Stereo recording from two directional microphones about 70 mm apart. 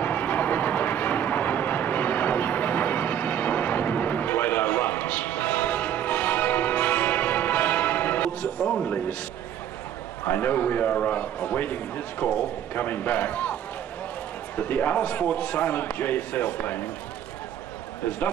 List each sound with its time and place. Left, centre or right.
0.0 s vehicle: left
8.5 s a sound: centre
10.2 s speech: left
14.6 s speech: left